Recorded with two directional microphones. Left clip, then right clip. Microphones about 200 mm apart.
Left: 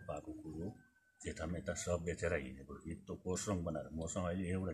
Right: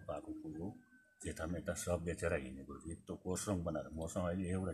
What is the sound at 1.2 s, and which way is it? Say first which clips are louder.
Speech: even; 20° right (ahead or behind).